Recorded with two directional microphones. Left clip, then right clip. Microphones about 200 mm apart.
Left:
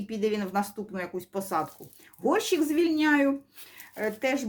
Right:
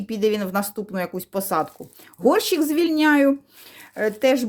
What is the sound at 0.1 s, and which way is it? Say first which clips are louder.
Speech: right 7 dB; 50° right (ahead or behind).